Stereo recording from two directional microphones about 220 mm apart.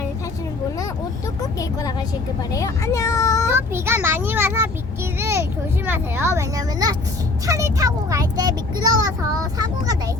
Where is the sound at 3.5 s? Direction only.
10° right (ahead or behind).